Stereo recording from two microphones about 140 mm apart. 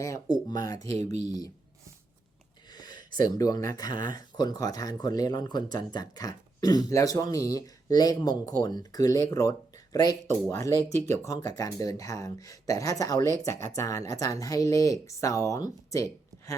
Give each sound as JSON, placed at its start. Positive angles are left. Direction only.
{"t": 0.0, "sound": "speech", "side_deg": 25}
{"t": 2.7, "sound": "a sound", "side_deg": 30}
{"t": 3.2, "sound": "speech", "side_deg": 25}